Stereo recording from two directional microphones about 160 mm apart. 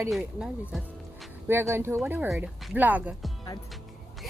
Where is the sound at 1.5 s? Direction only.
15° right (ahead or behind).